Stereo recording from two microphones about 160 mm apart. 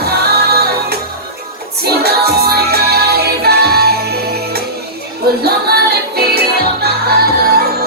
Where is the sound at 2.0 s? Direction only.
80° right.